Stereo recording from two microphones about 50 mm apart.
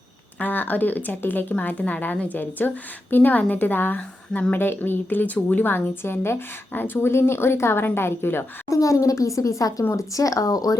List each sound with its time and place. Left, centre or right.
0.3 s a woman's voice: left
5.9 s a woman's voice: left
8.7 s speech: left